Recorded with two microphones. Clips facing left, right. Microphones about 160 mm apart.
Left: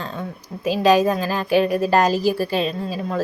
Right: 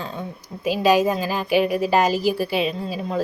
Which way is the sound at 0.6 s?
10° right (ahead or behind).